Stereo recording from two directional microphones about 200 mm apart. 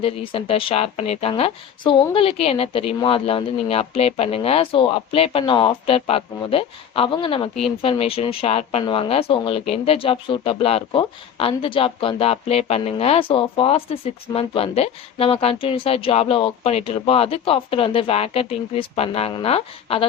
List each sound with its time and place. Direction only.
0.0 s speech: 25° left (ahead or behind)